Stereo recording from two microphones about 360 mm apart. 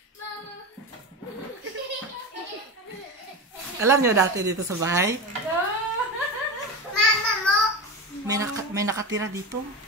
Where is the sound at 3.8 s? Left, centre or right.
Centre.